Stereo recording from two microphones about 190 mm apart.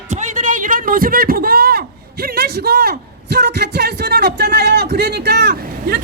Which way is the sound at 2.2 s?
55° right (ahead or behind).